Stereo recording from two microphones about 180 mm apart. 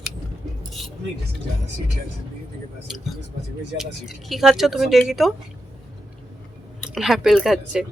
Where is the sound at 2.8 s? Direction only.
Centre (ahead or behind).